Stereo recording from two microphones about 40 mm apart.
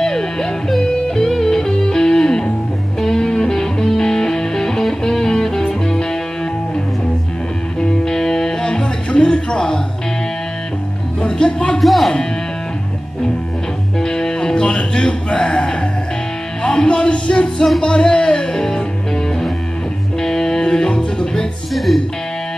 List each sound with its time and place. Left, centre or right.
0.0 s music: centre
7.8 s music: centre
11.2 s music: left
11.8 s music: centre
13.9 s music: centre
20.2 s music: centre
21.7 s music: centre